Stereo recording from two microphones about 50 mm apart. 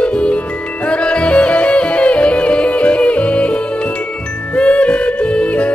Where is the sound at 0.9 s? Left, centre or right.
Left.